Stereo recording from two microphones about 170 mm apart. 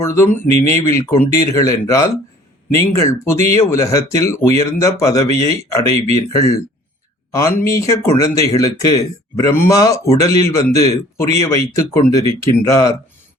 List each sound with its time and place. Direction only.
0.0 s speech: 15° left (ahead or behind)